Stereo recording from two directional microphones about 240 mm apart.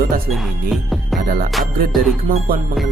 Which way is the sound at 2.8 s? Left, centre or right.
Centre.